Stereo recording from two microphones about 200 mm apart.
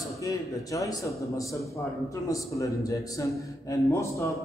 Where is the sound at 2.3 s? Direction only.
15° left (ahead or behind).